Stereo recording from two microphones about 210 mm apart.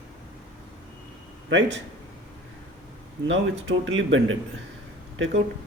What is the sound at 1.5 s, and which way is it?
Speech, 60° right (ahead or behind).